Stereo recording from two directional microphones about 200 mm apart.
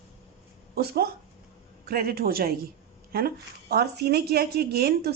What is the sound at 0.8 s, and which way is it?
A woman's voice, 50° right (ahead or behind).